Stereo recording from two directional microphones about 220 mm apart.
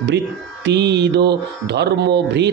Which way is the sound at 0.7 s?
50° right (ahead or behind).